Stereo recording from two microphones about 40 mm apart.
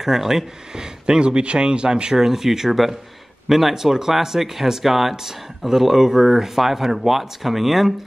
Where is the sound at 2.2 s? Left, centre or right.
Centre.